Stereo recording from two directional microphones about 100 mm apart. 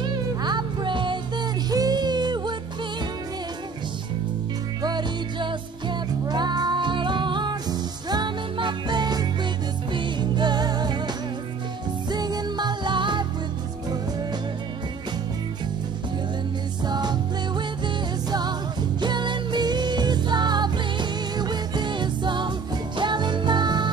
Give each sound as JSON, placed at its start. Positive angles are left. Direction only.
{"t": 0.0, "sound": "music", "side_deg": -45}
{"t": 4.8, "sound": "music", "side_deg": -50}
{"t": 12.1, "sound": "music", "side_deg": -40}
{"t": 16.8, "sound": "music", "side_deg": -45}